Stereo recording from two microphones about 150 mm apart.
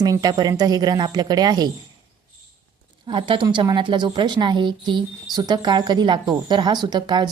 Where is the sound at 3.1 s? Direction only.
35° right (ahead or behind).